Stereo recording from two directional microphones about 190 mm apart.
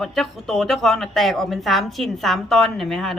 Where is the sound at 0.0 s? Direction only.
Centre (ahead or behind).